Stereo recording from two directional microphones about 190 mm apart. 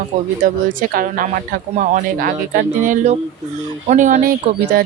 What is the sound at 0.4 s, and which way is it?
Speech, 45° right (ahead or behind).